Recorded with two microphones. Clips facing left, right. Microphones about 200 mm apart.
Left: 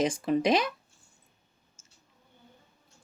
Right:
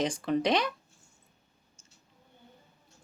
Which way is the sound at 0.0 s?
5° left (ahead or behind).